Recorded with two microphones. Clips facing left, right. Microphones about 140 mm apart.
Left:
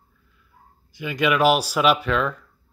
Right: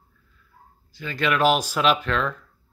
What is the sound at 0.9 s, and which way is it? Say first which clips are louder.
Speech: left 3 dB; 15° left (ahead or behind).